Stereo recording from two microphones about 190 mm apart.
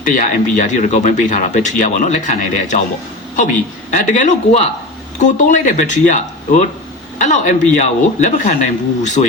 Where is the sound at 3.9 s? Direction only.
40° left (ahead or behind).